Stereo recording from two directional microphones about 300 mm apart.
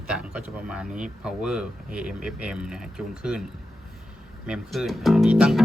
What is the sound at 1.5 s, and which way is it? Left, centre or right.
Speech, centre.